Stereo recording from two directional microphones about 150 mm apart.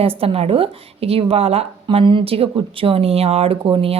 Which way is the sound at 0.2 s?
40° right (ahead or behind).